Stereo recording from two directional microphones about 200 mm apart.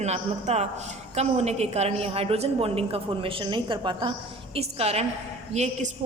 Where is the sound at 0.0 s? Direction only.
35° right (ahead or behind).